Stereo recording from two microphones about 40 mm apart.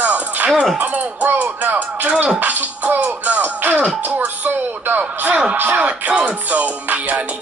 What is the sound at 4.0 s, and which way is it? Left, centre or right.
Speech, right.